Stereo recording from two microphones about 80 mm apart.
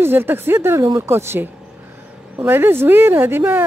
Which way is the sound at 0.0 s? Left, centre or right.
Right.